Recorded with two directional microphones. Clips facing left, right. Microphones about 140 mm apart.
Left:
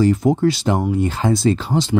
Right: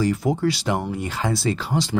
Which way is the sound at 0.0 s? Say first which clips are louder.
Left 6 dB; 25° left (ahead or behind).